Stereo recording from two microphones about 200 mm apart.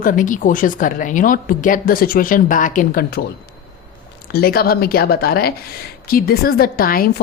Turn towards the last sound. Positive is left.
turn(degrees=45)  # may be behind; listen again after turning